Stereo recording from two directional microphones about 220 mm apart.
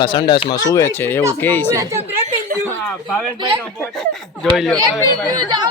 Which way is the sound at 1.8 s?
15° right (ahead or behind).